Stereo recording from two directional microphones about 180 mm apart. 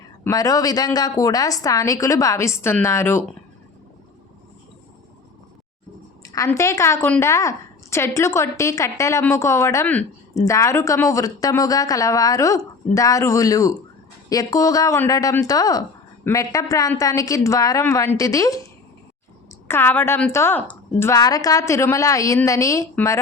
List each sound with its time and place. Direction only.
0.3 s a woman's voice: 20° left (ahead or behind)
6.2 s a woman's voice: 15° left (ahead or behind)